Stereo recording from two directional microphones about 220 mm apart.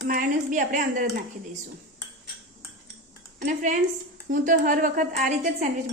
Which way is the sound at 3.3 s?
35° right (ahead or behind).